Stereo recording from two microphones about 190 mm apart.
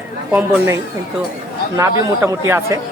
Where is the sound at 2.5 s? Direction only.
10° right (ahead or behind).